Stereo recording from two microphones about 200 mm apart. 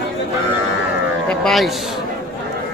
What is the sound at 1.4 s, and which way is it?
Speech, centre (ahead or behind).